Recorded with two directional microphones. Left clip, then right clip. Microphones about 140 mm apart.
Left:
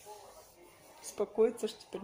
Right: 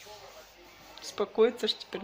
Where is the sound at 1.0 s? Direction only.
15° left (ahead or behind).